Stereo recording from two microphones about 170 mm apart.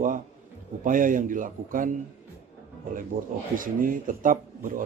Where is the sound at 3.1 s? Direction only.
55° right (ahead or behind).